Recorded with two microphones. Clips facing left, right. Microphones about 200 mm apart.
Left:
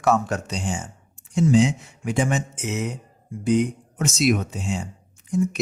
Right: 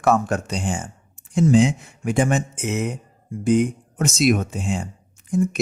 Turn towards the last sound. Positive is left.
turn(degrees=-50)  # may be behind; listen again after turning